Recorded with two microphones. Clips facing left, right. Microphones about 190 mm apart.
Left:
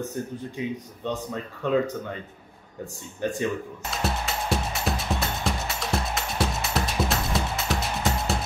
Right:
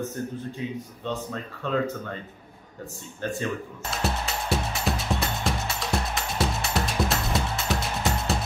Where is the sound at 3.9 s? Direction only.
Centre (ahead or behind).